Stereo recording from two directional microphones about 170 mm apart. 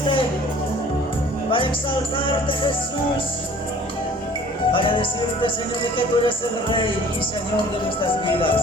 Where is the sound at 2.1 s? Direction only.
30° left (ahead or behind).